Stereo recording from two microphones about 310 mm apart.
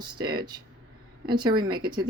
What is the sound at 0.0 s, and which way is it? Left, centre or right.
Speech, centre.